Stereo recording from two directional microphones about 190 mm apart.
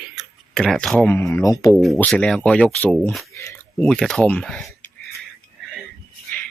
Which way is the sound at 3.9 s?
Centre (ahead or behind).